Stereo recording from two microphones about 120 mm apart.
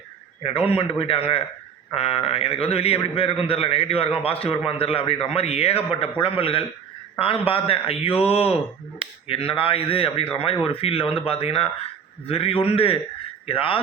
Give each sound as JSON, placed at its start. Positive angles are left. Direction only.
{"t": 0.4, "sound": "a man's voice", "side_deg": 55}